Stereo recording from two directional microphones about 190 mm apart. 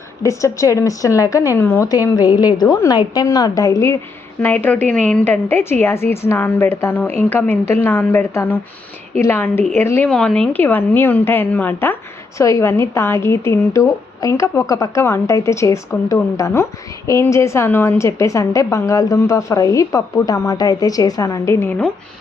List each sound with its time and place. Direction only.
0.2 s a woman's voice: 15° left (ahead or behind)